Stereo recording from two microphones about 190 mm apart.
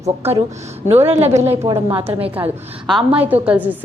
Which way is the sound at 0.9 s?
35° right (ahead or behind).